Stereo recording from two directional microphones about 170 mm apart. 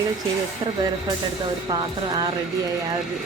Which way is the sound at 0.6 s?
25° right (ahead or behind).